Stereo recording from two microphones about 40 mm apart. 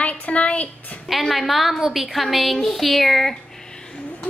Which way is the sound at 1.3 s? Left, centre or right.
Centre.